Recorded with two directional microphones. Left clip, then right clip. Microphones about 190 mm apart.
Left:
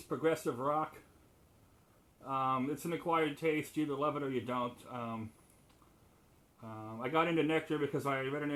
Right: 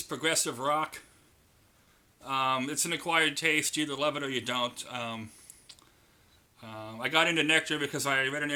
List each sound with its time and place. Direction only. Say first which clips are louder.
0.1 s speech: right 2 dB; 20° right (ahead or behind)
2.2 s speech: right 5 dB; 20° right (ahead or behind)
6.6 s speech: right 6 dB; 20° right (ahead or behind)